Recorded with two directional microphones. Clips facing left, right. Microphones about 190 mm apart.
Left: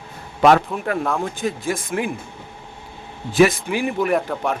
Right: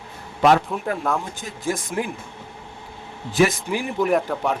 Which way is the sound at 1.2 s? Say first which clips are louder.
Left 6 dB; 60° left (ahead or behind).